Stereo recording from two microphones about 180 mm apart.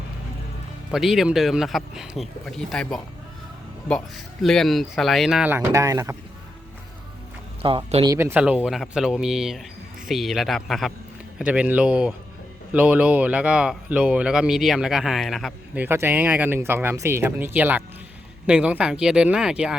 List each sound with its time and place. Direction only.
0.9 s speech: centre (ahead or behind)
4.4 s speech: centre (ahead or behind); by 6.1 s 15° right (ahead or behind)
7.6 s speech: 30° right (ahead or behind)
8.0 s speech: 15° right (ahead or behind)